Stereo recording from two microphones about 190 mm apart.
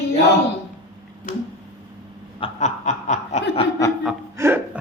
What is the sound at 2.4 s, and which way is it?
Snicker, 35° left (ahead or behind).